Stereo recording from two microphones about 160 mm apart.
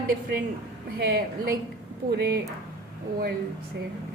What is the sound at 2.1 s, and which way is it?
Speech, 90° right.